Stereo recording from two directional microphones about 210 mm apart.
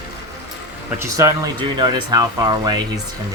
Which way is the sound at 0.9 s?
15° right (ahead or behind).